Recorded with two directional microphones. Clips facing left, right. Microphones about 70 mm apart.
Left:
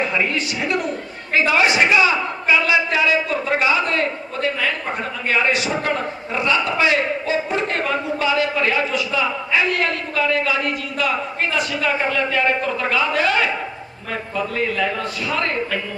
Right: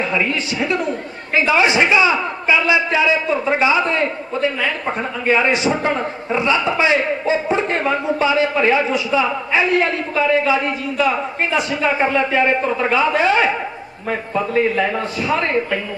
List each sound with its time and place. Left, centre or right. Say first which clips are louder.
1.3 s a man's voice: right 2 dB; right